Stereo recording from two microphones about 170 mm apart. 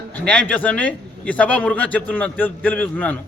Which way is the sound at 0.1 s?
10° left (ahead or behind).